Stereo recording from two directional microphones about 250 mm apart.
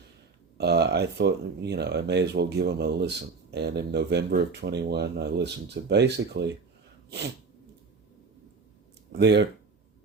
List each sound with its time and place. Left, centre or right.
0.5 s speech: right
9.1 s speech: right